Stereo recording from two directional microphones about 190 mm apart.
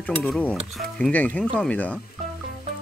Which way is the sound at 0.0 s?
5° left (ahead or behind).